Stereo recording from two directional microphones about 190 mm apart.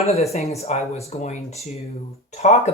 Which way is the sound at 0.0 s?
35° left (ahead or behind).